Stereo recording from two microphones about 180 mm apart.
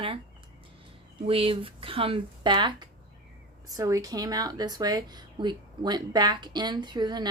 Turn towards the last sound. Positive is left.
turn(degrees=-25)  # may be behind; listen again after turning